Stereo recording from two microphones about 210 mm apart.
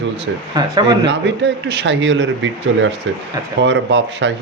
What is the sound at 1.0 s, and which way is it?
Speech, 55° right (ahead or behind).